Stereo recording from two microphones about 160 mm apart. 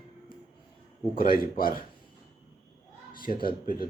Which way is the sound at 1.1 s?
65° left (ahead or behind).